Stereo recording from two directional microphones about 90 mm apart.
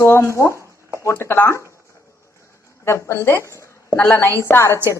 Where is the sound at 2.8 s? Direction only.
30° left (ahead or behind).